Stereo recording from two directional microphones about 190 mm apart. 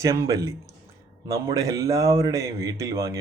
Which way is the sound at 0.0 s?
15° right (ahead or behind).